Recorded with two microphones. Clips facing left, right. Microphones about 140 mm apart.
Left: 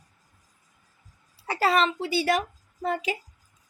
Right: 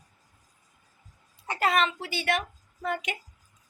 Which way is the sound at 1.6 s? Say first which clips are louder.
Left 3 dB; 35° left (ahead or behind).